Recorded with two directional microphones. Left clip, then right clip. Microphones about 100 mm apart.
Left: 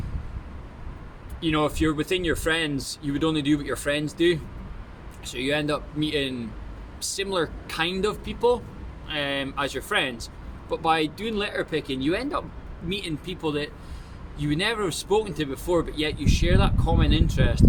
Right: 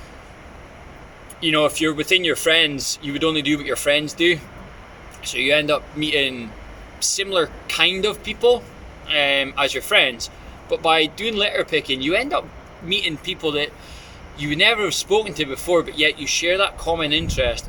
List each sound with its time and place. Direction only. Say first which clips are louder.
1.4 s speech: right 6 dB; 30° left (ahead or behind)